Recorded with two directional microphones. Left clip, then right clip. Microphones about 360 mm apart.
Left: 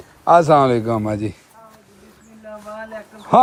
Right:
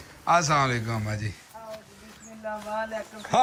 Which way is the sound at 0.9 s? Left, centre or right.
Left.